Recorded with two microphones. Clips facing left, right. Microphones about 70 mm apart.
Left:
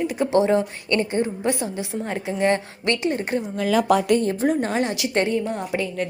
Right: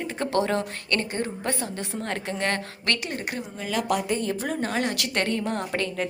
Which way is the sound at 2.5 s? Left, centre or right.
Left.